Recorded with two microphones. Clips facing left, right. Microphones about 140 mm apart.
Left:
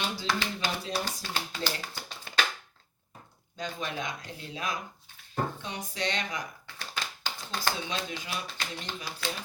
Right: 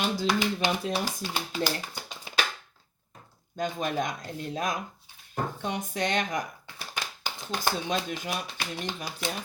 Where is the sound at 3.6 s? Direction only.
45° right (ahead or behind).